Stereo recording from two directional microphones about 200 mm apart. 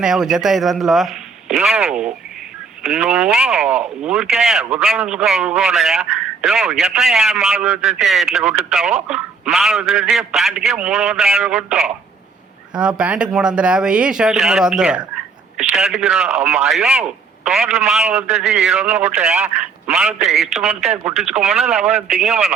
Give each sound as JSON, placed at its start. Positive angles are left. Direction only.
{"t": 0.0, "sound": "a man's voice", "side_deg": 0}
{"t": 13.0, "sound": "a man's voice", "side_deg": -5}
{"t": 21.8, "sound": "a man's voice", "side_deg": -35}
{"t": 22.1, "sound": "a man's voice", "side_deg": 0}